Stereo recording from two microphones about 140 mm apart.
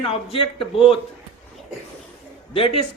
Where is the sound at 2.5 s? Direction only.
40° left (ahead or behind).